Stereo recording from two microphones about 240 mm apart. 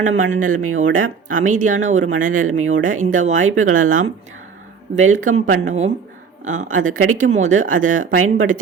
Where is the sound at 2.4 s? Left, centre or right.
Right.